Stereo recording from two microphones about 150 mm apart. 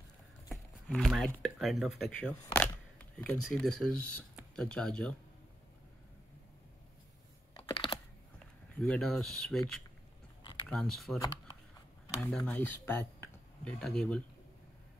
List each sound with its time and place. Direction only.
0.5 s speech: centre (ahead or behind)
7.7 s computer keyboard: 35° left (ahead or behind)
8.7 s speech: 5° left (ahead or behind)
10.7 s speech: centre (ahead or behind)
11.1 s speech: 30° left (ahead or behind)
12.3 s speech: centre (ahead or behind)
12.5 s speech: 15° left (ahead or behind)